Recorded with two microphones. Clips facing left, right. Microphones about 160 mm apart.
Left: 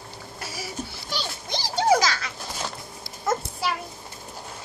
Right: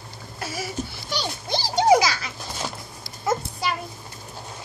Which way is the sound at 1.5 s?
30° right (ahead or behind).